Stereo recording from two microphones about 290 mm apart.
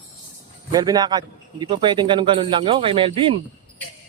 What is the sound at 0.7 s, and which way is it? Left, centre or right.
A man's voice, centre.